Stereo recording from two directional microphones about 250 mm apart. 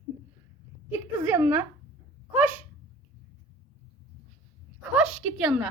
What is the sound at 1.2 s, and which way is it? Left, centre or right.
Speech, centre.